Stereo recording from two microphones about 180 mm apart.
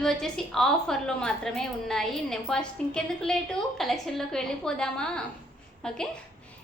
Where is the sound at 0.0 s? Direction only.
5° left (ahead or behind).